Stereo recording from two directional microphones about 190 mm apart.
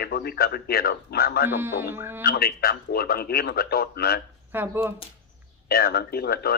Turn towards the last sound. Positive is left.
turn(degrees=55)  # may be behind; listen again after turning